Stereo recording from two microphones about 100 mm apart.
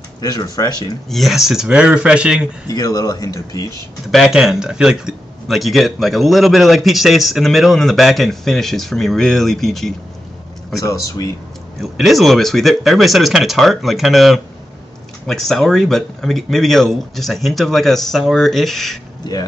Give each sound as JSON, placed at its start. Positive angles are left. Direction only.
{"t": 0.2, "sound": "speech", "side_deg": 40}
{"t": 1.1, "sound": "speech", "side_deg": 0}
{"t": 2.7, "sound": "speech", "side_deg": 40}
{"t": 4.1, "sound": "speech", "side_deg": -5}
{"t": 10.8, "sound": "speech", "side_deg": 35}
{"t": 11.8, "sound": "speech", "side_deg": 0}
{"t": 19.2, "sound": "speech", "side_deg": 45}